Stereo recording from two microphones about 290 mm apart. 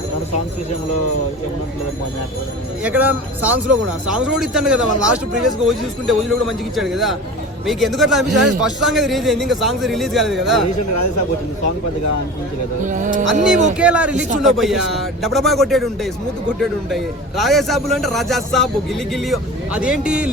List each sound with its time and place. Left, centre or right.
2.8 s a man's voice: centre
12.8 s speech: right
13.7 s a man's voice: centre